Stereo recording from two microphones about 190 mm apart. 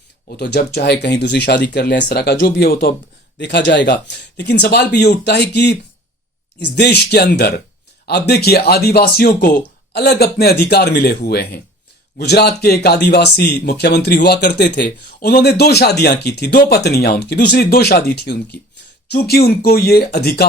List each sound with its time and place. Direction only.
0.3 s speech: 60° left (ahead or behind)
3.3 s speech: 65° left (ahead or behind)